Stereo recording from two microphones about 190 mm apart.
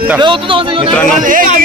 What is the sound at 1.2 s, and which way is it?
Speech, 45° right (ahead or behind).